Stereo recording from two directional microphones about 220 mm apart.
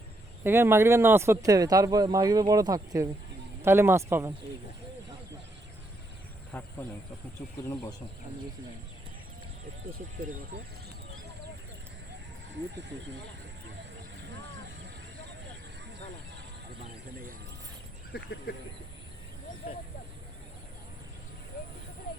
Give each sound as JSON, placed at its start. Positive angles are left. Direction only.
{"t": 0.4, "sound": "speech", "side_deg": -10}
{"t": 6.5, "sound": "a sound", "side_deg": 5}
{"t": 7.7, "sound": "speech", "side_deg": 15}
{"t": 18.1, "sound": "speech", "side_deg": 45}